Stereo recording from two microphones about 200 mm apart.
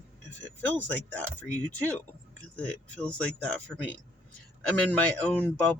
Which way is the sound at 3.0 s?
5° left (ahead or behind).